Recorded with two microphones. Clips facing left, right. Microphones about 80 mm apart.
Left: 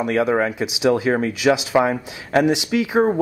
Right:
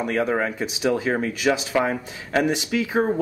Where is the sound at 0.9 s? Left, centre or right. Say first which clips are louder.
Left 4 dB; centre.